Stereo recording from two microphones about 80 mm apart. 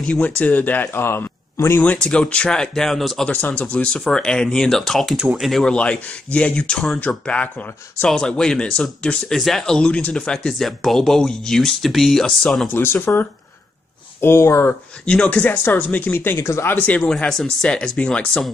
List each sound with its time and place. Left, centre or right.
0.4 s speech: left
1.8 s speech: centre
3.3 s speech: left; by 5.1 s centre
5.1 s speech: centre
5.4 s speech: centre
12.7 s speech: left
15.0 s speech: centre
16.3 s speech: left
16.7 s speech: centre
17.3 s speech: centre